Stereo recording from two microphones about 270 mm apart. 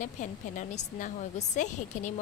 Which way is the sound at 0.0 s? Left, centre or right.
Left.